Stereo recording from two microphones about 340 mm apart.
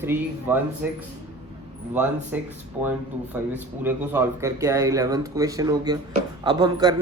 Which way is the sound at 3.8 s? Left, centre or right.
Centre.